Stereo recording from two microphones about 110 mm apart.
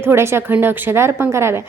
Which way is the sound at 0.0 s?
20° right (ahead or behind).